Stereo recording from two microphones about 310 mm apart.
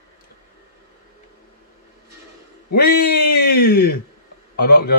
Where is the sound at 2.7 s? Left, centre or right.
Left.